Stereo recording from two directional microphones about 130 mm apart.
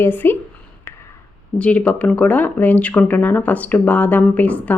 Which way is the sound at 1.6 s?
10° left (ahead or behind).